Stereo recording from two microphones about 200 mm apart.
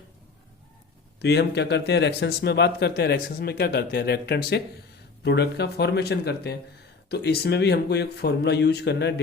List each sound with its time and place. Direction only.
1.2 s speech: 55° left (ahead or behind)